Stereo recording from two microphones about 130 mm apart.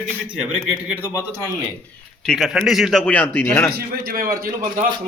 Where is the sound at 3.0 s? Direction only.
10° left (ahead or behind).